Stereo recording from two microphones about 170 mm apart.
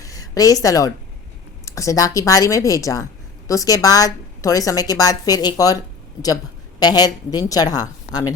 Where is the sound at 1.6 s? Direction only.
20° left (ahead or behind).